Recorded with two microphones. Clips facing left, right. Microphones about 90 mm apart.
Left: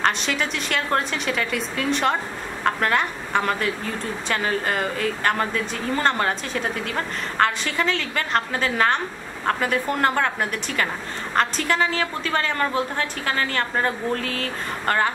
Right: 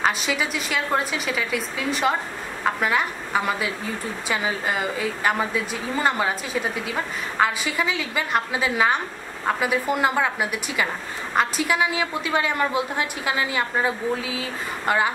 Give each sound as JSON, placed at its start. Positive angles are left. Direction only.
{"t": 0.0, "sound": "a woman's voice", "side_deg": -5}